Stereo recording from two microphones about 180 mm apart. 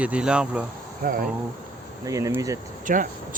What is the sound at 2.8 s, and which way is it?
Speech, 45° right (ahead or behind).